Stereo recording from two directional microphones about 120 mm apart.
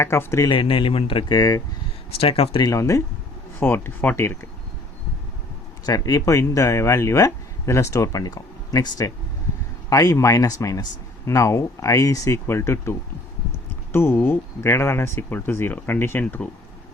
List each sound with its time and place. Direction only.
0.0 s speech: 20° left (ahead or behind)
0.4 s speech: 45° left (ahead or behind)
1.4 s speech: 30° left (ahead or behind)
2.2 s speech: 50° left (ahead or behind)
2.6 s speech: 25° left (ahead or behind)
5.8 s speech: 30° left (ahead or behind); by 16.5 s 10° left (ahead or behind)